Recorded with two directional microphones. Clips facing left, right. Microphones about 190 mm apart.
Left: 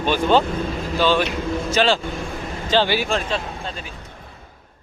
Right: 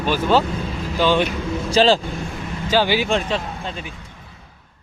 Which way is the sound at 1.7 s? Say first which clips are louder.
Right 4 dB; 35° right (ahead or behind).